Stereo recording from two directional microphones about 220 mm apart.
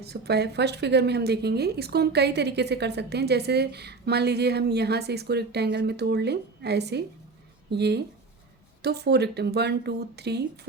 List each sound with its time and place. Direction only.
0.0 s speech: 45° right (ahead or behind)